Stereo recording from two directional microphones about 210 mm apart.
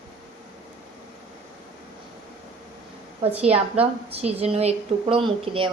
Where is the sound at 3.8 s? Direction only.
30° right (ahead or behind).